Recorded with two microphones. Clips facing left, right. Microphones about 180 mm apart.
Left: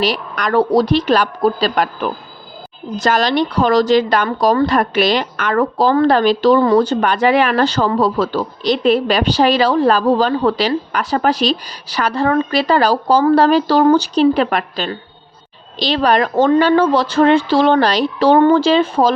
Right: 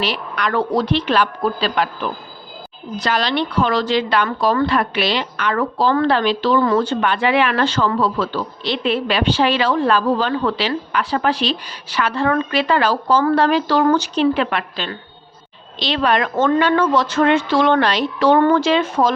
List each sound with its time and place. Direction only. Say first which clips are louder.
0.0 s a woman's voice: left 3 dB; 40° left (ahead or behind)
2.9 s a woman's voice: left 4 dB; 45° left (ahead or behind)